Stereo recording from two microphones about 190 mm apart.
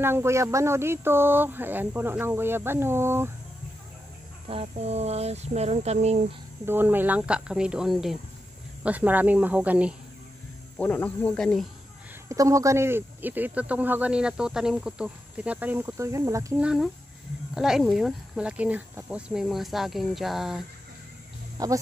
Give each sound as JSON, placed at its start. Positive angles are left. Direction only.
{"t": 0.0, "sound": "speech", "side_deg": -15}
{"t": 4.5, "sound": "speech", "side_deg": -30}
{"t": 6.6, "sound": "speech", "side_deg": -10}
{"t": 10.8, "sound": "speech", "side_deg": 10}
{"t": 12.3, "sound": "speech", "side_deg": -15}
{"t": 16.6, "sound": "speech", "side_deg": 0}
{"t": 21.6, "sound": "speech", "side_deg": -20}